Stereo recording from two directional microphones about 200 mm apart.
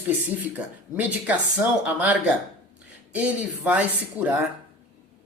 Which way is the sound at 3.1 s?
10° right (ahead or behind).